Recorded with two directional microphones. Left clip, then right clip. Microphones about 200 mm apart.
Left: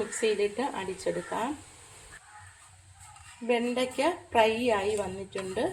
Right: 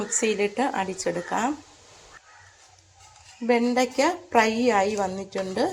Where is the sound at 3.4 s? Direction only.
35° right (ahead or behind).